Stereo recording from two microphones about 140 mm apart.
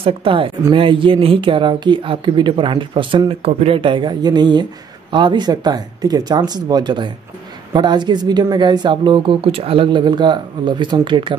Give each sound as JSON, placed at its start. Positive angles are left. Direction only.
{"t": 0.0, "sound": "speech", "side_deg": -40}